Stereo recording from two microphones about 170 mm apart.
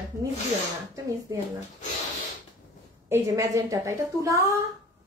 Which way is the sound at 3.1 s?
15° right (ahead or behind).